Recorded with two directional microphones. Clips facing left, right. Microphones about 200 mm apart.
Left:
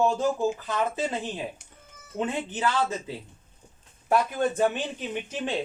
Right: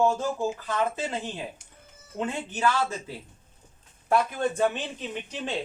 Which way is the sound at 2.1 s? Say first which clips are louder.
Left 1 dB; 20° left (ahead or behind).